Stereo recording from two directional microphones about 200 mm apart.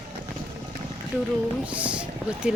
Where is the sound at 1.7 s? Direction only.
5° right (ahead or behind).